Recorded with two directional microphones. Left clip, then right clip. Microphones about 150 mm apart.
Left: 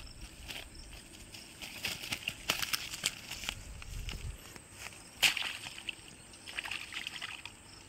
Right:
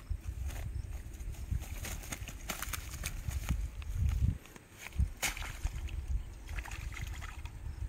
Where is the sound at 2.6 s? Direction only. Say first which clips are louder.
Left 7 dB; centre (ahead or behind).